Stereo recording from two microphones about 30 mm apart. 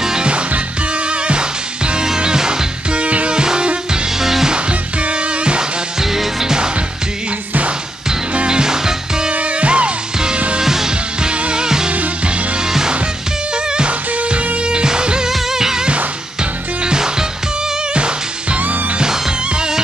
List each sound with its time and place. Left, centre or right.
2.1 s music: right
2.9 s music: right
3.3 s music: right
4.2 s music: centre
5.6 s music: centre
8.5 s music: right
9.3 s music: right
10.6 s music: centre
13.7 s music: right
15.2 s music: centre
17.9 s music: right